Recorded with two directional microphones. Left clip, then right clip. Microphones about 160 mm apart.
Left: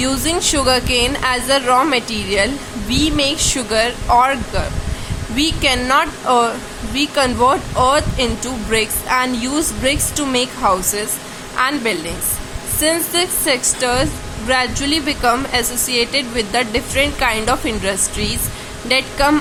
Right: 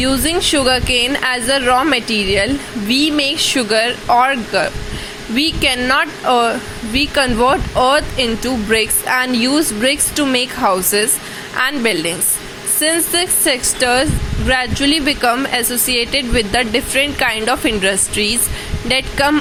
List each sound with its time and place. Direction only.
0.0 s speech: 15° right (ahead or behind)